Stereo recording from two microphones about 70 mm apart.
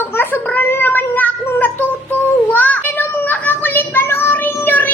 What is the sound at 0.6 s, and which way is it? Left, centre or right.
Child singing, left.